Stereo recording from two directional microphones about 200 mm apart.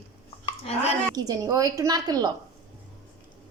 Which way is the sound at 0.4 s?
30° left (ahead or behind).